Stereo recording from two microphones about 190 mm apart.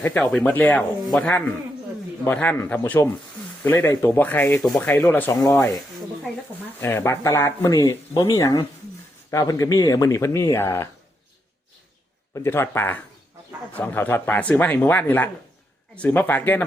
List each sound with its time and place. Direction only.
0.0 s speech: 5° left (ahead or behind)
6.7 s speech: 15° left (ahead or behind)
12.3 s speech: 10° left (ahead or behind)